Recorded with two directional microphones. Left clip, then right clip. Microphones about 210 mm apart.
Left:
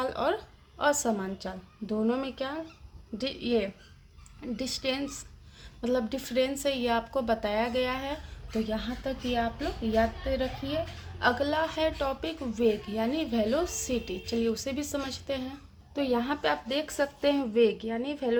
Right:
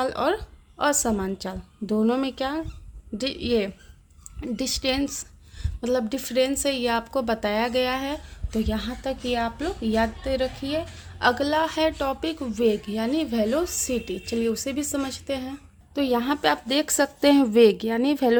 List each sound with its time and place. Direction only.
0.0 s a woman's voice: 45° right (ahead or behind)